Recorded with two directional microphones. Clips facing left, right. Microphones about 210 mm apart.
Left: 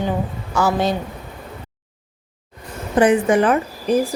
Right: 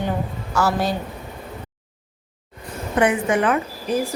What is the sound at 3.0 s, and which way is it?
Speech, 35° left (ahead or behind).